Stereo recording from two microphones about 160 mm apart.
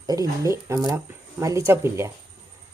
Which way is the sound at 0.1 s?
20° right (ahead or behind).